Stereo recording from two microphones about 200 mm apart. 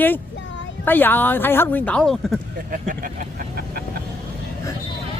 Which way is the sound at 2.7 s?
45° right (ahead or behind).